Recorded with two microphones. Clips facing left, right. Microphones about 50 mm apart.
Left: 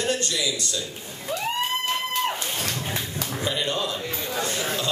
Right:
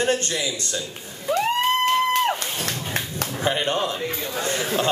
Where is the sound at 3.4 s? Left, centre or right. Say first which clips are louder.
Right 4 dB; right.